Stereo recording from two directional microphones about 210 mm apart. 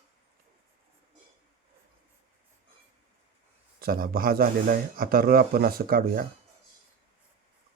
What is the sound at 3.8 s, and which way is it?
Speech, 45° right (ahead or behind).